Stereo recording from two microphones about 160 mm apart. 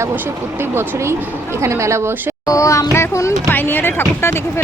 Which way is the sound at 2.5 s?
20° left (ahead or behind).